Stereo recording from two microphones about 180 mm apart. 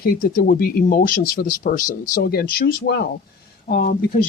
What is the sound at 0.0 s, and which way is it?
Speech, 55° left (ahead or behind).